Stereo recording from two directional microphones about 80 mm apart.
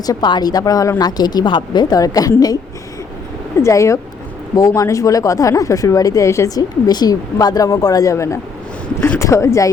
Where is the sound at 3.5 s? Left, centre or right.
Left.